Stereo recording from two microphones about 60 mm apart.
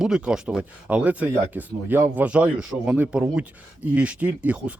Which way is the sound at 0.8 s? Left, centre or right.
Right.